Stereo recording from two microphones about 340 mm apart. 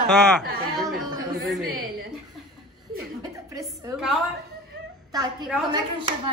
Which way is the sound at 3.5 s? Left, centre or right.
Centre.